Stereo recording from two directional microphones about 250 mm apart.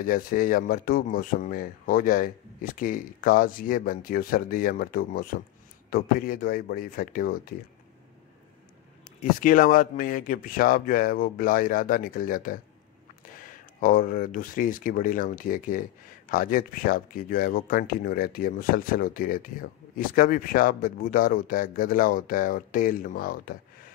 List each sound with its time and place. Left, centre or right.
0.0 s speech: left
9.2 s speech: left